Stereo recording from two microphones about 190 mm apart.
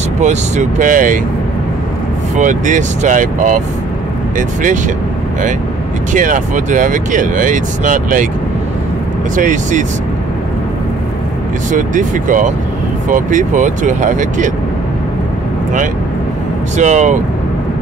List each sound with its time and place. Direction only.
0.2 s speech: 40° right (ahead or behind)
2.3 s speech: 40° right (ahead or behind)
6.1 s speech: 45° right (ahead or behind)
9.3 s speech: 40° right (ahead or behind)
11.7 s speech: 40° right (ahead or behind)
16.7 s speech: 40° right (ahead or behind)